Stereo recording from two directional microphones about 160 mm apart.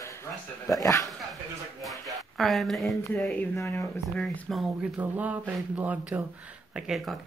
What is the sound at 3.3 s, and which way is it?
Speech, 15° left (ahead or behind).